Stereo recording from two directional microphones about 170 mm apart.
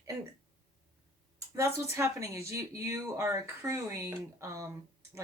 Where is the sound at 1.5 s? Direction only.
15° right (ahead or behind).